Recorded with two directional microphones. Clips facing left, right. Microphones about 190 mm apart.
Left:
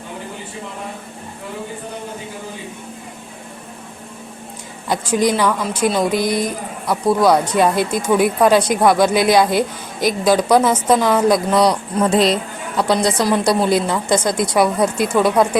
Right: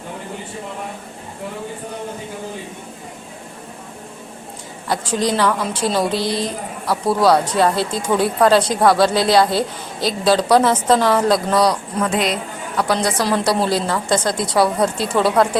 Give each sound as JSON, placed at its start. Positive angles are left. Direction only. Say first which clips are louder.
{"t": 4.9, "sound": "speech", "louder": "left 3 dB", "side_deg": 15}
{"t": 6.8, "sound": "a man's voice", "louder": "left 2 dB", "side_deg": -5}
{"t": 7.2, "sound": "speech", "louder": "even", "side_deg": 15}
{"t": 11.9, "sound": "a woman's voice", "louder": "left 4 dB", "side_deg": 30}